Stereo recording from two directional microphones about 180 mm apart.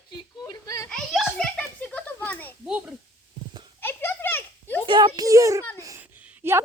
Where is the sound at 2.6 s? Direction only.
5° right (ahead or behind).